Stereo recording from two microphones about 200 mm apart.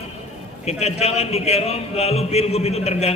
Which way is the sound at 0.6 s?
30° left (ahead or behind).